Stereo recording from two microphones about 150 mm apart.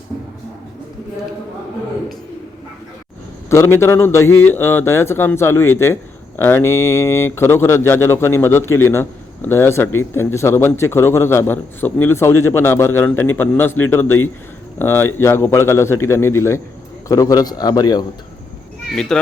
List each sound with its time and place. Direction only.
3.5 s a man's voice: 20° left (ahead or behind)
18.9 s a child's voice: 5° left (ahead or behind)